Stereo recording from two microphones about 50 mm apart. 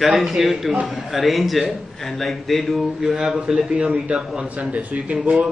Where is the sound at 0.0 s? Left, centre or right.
Centre.